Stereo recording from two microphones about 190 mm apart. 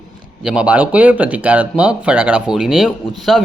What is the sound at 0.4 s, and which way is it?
Speech, 5° right (ahead or behind).